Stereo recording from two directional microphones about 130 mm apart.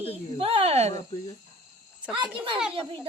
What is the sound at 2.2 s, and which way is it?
Speech, 40° right (ahead or behind).